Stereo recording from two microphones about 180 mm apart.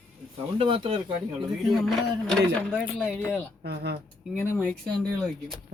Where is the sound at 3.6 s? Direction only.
65° right (ahead or behind).